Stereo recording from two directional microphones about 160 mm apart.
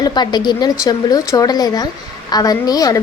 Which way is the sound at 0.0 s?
25° left (ahead or behind).